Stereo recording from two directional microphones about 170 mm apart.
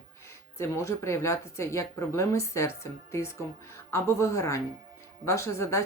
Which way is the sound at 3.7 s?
15° left (ahead or behind).